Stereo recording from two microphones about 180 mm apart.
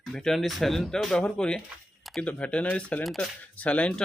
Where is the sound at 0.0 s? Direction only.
Centre (ahead or behind).